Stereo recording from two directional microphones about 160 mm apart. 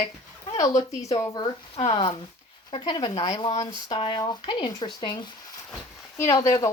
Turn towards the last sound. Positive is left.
turn(degrees=15)  # may be behind; listen again after turning